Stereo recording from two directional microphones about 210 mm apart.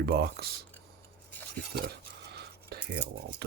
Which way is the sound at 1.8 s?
50° right (ahead or behind).